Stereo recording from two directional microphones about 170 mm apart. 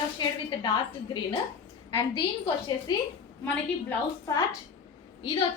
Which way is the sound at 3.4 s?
15° left (ahead or behind).